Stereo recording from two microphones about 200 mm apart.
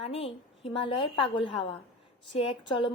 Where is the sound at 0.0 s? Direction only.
30° left (ahead or behind).